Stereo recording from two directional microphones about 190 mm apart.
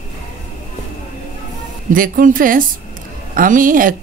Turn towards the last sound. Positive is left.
turn(degrees=-45)  # may be behind; listen again after turning